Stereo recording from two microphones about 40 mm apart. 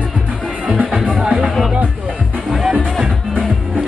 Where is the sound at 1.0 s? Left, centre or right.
Right.